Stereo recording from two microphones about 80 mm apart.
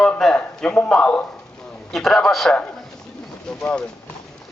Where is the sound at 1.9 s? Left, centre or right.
Centre.